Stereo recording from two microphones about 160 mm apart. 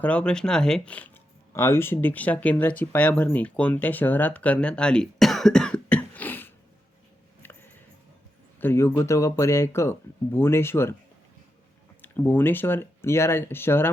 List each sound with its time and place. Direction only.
0.0 s speech: 5° left (ahead or behind)
7.4 s a sound: 15° left (ahead or behind)
8.6 s speech: 15° left (ahead or behind)
12.0 s speech: 10° left (ahead or behind)